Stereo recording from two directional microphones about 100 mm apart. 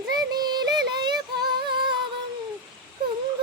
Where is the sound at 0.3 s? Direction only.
45° right (ahead or behind).